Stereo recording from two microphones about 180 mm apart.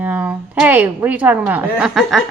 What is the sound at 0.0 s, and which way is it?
A woman's voice, 10° right (ahead or behind).